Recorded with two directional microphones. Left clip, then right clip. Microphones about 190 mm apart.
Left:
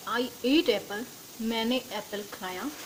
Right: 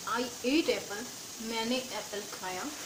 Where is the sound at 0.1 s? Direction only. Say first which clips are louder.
Left 4 dB; 55° left (ahead or behind).